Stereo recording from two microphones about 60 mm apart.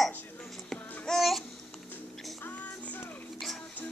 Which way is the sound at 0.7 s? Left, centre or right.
Centre.